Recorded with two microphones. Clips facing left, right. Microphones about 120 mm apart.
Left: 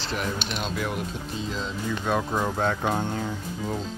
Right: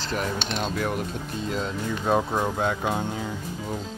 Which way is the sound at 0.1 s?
40° right (ahead or behind).